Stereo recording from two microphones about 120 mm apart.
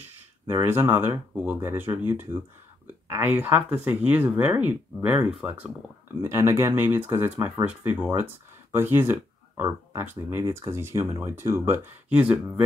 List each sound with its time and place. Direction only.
0.5 s speech: 20° right (ahead or behind)